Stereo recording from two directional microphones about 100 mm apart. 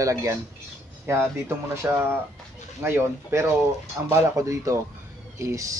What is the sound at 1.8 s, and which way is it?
Speech, 25° right (ahead or behind).